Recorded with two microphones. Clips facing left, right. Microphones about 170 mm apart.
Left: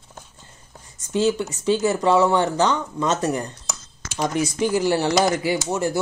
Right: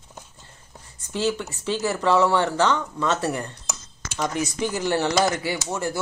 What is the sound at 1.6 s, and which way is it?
Speech, 15° left (ahead or behind).